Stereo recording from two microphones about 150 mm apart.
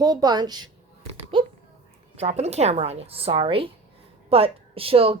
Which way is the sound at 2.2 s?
45° right (ahead or behind).